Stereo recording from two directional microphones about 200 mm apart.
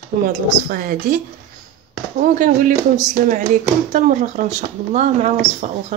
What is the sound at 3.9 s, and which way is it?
Speech, 40° right (ahead or behind).